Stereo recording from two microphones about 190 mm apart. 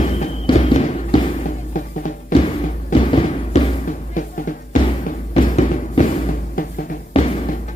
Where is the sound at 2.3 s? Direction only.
45° left (ahead or behind).